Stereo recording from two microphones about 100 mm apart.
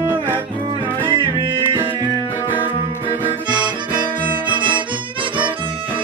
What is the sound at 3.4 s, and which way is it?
Harmonica, 50° right (ahead or behind).